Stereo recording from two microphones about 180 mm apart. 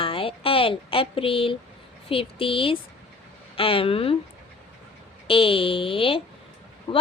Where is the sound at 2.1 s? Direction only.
30° left (ahead or behind).